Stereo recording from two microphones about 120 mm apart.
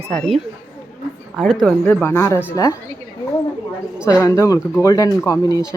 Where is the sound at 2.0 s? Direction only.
20° left (ahead or behind).